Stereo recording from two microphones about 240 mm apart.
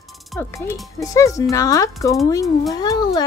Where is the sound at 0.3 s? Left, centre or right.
Centre.